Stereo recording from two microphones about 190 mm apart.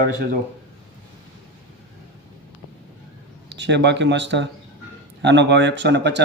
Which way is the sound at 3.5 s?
65° right (ahead or behind).